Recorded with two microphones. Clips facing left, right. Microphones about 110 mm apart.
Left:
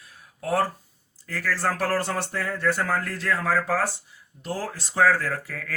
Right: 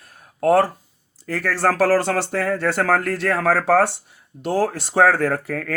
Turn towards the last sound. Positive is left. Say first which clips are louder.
# right 8 dB
turn(degrees=-60)  # may be behind; listen again after turning